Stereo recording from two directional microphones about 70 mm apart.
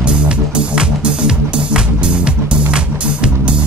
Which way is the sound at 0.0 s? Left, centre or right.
Centre.